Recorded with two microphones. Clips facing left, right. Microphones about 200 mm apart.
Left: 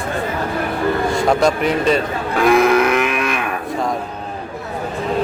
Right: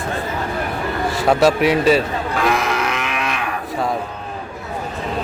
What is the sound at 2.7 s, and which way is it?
Livestock, 55° left (ahead or behind).